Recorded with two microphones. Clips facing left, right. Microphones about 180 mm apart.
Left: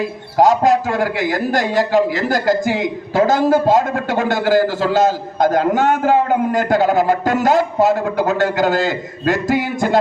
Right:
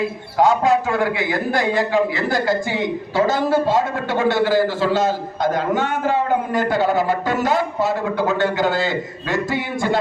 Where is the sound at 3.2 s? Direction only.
45° left (ahead or behind).